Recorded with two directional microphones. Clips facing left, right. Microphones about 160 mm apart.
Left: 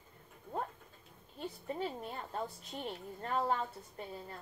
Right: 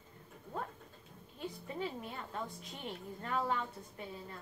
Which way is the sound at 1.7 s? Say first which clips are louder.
Left 3 dB; 35° left (ahead or behind).